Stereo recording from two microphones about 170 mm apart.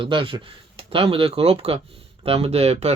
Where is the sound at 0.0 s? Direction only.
30° right (ahead or behind).